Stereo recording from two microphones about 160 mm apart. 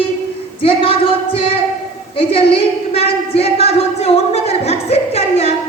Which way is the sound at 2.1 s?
35° left (ahead or behind).